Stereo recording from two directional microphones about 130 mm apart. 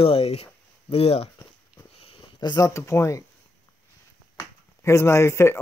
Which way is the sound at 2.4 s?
35° left (ahead or behind).